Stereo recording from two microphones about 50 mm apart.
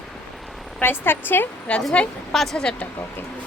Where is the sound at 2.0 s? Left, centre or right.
Left.